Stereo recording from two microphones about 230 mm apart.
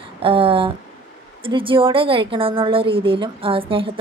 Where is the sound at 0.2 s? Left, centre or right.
Right.